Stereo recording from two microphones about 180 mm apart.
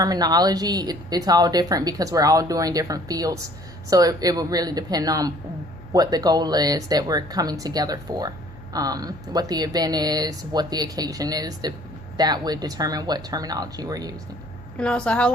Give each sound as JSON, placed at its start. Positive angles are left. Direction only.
{"t": 0.0, "sound": "a woman's voice", "side_deg": -20}
{"t": 14.8, "sound": "a woman's voice", "side_deg": 5}